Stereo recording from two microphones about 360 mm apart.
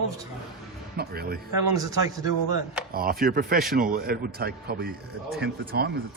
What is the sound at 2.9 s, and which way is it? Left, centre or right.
A man's voice, right.